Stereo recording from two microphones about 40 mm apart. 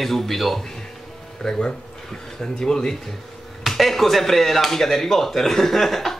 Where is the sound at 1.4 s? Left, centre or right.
Centre.